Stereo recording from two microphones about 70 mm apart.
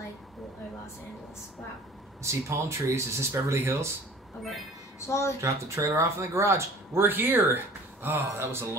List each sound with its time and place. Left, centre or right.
2.2 s speech: right
5.0 s speech: left
5.4 s speech: right